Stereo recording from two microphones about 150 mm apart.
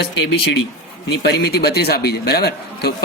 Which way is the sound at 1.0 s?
90° left.